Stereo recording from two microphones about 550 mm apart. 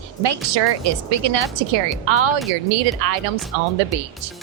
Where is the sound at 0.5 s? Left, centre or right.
Right.